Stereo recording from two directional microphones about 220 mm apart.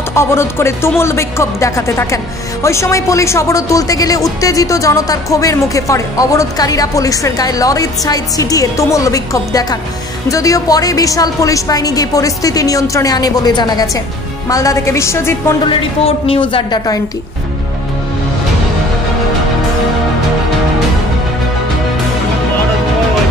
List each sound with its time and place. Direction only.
0.1 s speech: 10° left (ahead or behind)
15.7 s speech: 25° left (ahead or behind)